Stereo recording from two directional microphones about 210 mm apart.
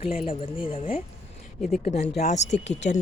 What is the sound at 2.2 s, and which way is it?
Speech, 30° left (ahead or behind).